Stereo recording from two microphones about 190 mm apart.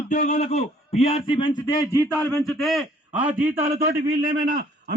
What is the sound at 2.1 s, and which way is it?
A man's voice, 5° left (ahead or behind).